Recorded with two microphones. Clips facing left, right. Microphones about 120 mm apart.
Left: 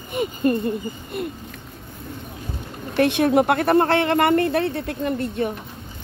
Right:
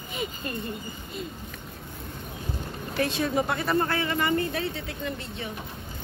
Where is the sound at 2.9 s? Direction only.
65° left (ahead or behind).